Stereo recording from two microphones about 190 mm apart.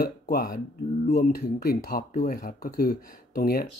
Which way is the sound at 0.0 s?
50° left (ahead or behind).